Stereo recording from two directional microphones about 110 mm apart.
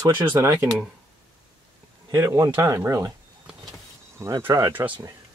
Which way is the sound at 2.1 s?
30° right (ahead or behind).